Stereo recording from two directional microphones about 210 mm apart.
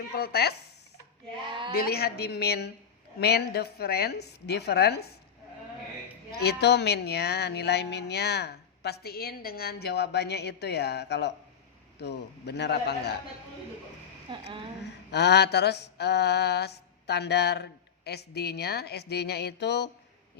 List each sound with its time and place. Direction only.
0.1 s mantra: 50° left (ahead or behind)
1.5 s speech: 25° right (ahead or behind)
1.7 s mantra: 45° left (ahead or behind)
6.3 s mantra: 50° left (ahead or behind)
14.3 s speech: 25° right (ahead or behind)
14.8 s mantra: 55° left (ahead or behind)